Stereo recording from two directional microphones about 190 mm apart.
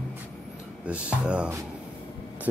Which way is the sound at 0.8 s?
5° right (ahead or behind).